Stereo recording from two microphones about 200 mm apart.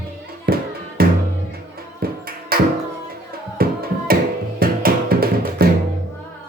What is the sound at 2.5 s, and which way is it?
Music, 50° right (ahead or behind).